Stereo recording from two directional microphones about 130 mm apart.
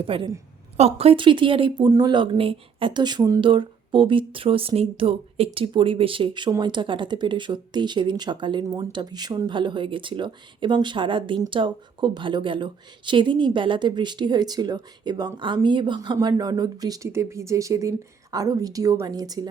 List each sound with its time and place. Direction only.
0.1 s a woman's voice: 45° right (ahead or behind)
3.4 s a woman's voice: 40° right (ahead or behind)